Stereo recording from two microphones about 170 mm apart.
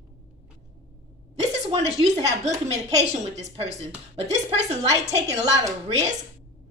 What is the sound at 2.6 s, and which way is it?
A woman's voice, 40° right (ahead or behind).